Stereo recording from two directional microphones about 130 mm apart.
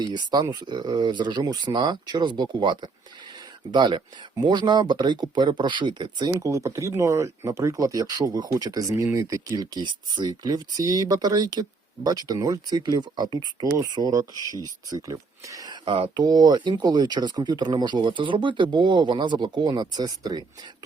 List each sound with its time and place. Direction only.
0.1 s speech: 30° right (ahead or behind)